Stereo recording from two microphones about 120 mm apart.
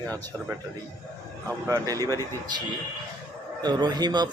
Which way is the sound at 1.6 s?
25° right (ahead or behind).